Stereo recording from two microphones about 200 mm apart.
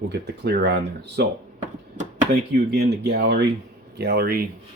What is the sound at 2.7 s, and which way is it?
Speech, 55° right (ahead or behind).